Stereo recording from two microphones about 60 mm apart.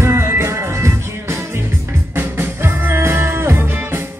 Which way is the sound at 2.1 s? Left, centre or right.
Right.